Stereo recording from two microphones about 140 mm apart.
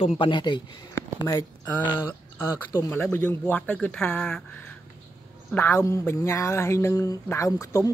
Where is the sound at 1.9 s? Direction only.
15° left (ahead or behind).